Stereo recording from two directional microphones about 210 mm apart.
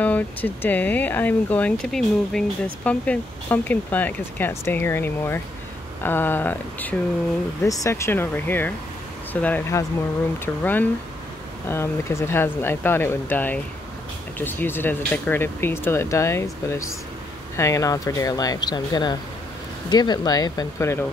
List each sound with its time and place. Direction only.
0.0 s speech: 10° left (ahead or behind)